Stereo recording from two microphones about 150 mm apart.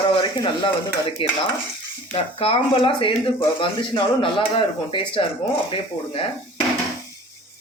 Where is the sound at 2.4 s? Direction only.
40° left (ahead or behind).